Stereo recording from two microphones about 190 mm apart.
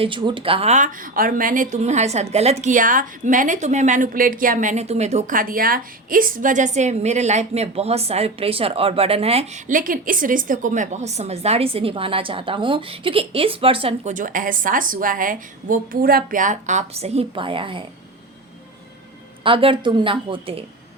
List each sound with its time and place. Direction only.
0.0 s speech: 25° right (ahead or behind)
19.5 s a woman's voice: 30° right (ahead or behind)